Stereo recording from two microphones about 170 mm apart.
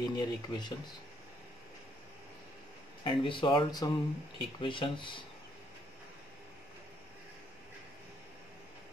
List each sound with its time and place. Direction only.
0.0 s speech: 25° left (ahead or behind)
3.0 s speech: 30° left (ahead or behind)